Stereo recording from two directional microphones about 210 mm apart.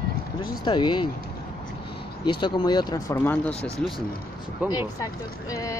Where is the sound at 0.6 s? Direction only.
20° left (ahead or behind).